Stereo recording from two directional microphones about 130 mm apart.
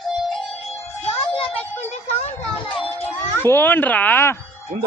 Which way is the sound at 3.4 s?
15° left (ahead or behind).